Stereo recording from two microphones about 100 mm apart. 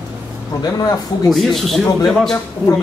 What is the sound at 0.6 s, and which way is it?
Speech, 40° left (ahead or behind).